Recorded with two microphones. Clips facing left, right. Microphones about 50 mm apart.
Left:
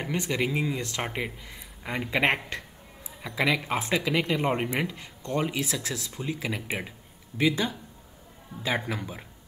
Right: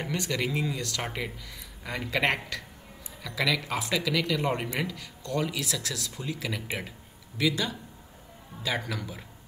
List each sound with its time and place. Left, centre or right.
0.0 s speech: centre